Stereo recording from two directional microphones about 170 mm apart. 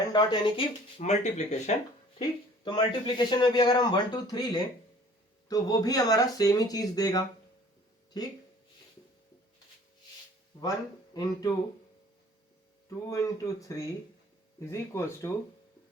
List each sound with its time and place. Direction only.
0.1 s speech: 25° left (ahead or behind); by 1.7 s 40° left (ahead or behind)
2.6 s speech: 25° left (ahead or behind)
10.6 s speech: 20° left (ahead or behind)
13.1 s speech: 20° left (ahead or behind)